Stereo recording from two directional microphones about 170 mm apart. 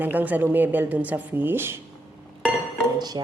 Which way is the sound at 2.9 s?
25° right (ahead or behind).